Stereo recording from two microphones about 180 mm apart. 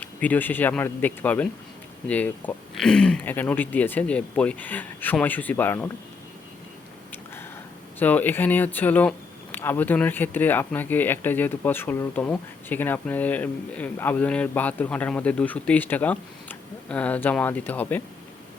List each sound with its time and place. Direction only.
0.0 s speech: 10° left (ahead or behind)
7.9 s speech: 10° left (ahead or behind)